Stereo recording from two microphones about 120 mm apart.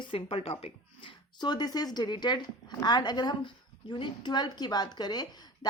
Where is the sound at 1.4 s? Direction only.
35° left (ahead or behind).